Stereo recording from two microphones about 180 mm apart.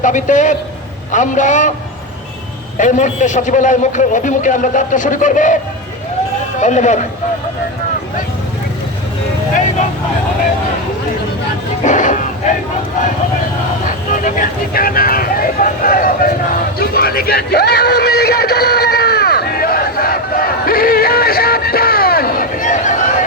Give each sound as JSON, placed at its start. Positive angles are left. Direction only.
{"t": 0.0, "sound": "a man's voice", "side_deg": 45}
{"t": 2.7, "sound": "a man's voice", "side_deg": 45}
{"t": 6.6, "sound": "speech", "side_deg": 40}
{"t": 11.8, "sound": "a sound", "side_deg": 45}
{"t": 13.8, "sound": "vehicle", "side_deg": 50}